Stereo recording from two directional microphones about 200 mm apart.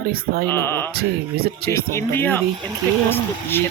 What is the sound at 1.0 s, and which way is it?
Speech, 50° right (ahead or behind).